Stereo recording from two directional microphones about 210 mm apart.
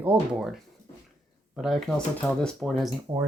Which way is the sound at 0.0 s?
5° right (ahead or behind).